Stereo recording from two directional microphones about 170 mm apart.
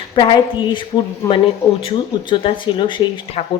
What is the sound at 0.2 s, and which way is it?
Speech, 25° left (ahead or behind).